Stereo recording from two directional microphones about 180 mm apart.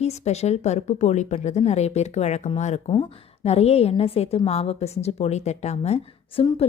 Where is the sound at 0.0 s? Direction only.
35° left (ahead or behind).